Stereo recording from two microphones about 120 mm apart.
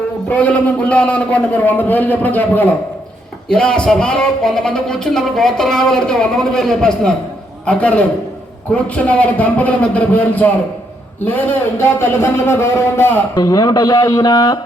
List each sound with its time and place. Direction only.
0.3 s a man's voice: 10° left (ahead or behind); by 14.6 s 35° left (ahead or behind)